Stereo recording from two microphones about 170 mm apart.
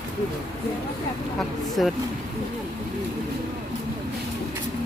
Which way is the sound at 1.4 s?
Centre (ahead or behind).